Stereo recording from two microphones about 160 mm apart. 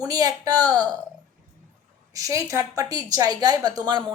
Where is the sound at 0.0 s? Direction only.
25° right (ahead or behind).